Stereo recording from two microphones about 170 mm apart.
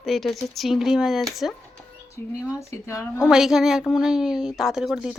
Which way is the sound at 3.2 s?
Centre (ahead or behind).